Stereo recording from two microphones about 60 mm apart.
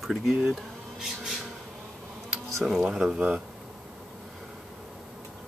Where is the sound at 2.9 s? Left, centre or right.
Centre.